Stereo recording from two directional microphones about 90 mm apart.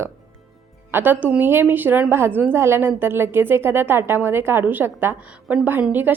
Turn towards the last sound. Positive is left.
turn(degrees=-20)  # may be behind; listen again after turning